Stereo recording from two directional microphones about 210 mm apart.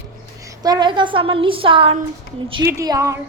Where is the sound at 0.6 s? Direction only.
20° right (ahead or behind).